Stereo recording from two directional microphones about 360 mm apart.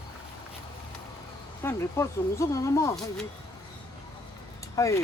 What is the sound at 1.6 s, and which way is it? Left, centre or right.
Speech, centre.